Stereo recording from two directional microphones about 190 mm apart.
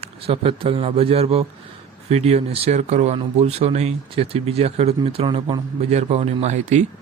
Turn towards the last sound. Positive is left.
turn(degrees=-35)  # may be behind; listen again after turning